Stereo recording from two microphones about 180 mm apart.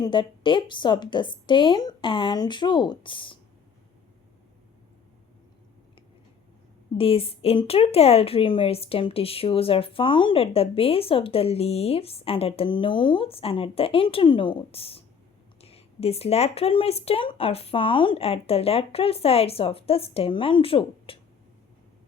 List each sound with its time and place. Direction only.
0.0 s a woman's voice: 25° left (ahead or behind)
6.9 s a woman's voice: 30° left (ahead or behind)